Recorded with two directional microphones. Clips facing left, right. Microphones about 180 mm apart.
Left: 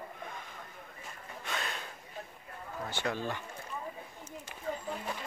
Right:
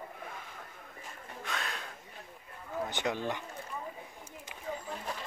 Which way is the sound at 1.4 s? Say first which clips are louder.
Left 1 dB; centre (ahead or behind).